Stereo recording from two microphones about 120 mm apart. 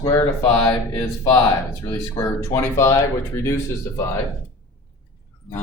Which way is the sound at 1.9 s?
30° left (ahead or behind).